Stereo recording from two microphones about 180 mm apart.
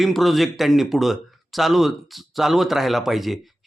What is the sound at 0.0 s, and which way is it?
Speech, centre (ahead or behind).